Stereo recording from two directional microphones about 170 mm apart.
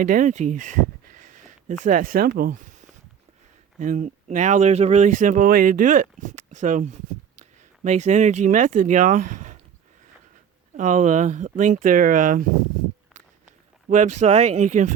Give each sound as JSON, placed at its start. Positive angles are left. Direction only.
{"t": 0.0, "sound": "speech", "side_deg": -50}
{"t": 10.8, "sound": "speech", "side_deg": -45}
{"t": 13.9, "sound": "speech", "side_deg": -45}